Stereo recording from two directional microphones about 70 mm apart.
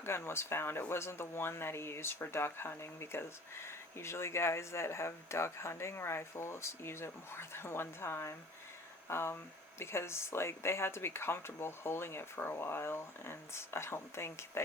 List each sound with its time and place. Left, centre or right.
0.0 s speech: left